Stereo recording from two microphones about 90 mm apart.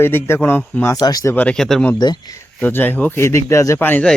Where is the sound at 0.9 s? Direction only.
45° left (ahead or behind).